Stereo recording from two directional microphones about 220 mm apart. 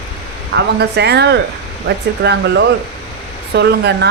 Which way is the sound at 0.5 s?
50° right (ahead or behind).